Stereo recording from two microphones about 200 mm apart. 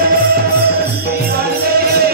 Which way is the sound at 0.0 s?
45° right (ahead or behind).